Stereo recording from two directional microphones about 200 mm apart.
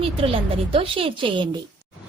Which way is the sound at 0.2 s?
30° right (ahead or behind).